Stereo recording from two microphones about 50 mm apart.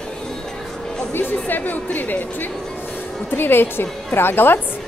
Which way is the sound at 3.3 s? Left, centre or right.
Left.